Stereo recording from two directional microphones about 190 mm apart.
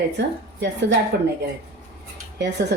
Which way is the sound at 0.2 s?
65° right (ahead or behind).